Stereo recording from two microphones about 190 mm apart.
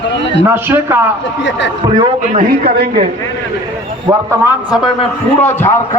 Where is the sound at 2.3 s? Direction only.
55° right (ahead or behind).